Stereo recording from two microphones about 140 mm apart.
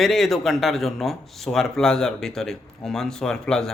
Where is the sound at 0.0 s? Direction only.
Centre (ahead or behind).